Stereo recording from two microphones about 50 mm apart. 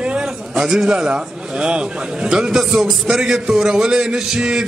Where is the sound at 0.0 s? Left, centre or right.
Right.